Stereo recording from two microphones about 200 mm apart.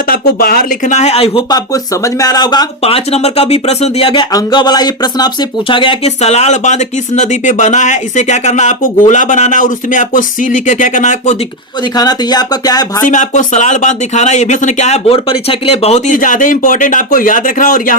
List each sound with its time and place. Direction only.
0.1 s speech: 45° left (ahead or behind)
11.9 s speech: 20° left (ahead or behind)
13.1 s speech: 40° left (ahead or behind)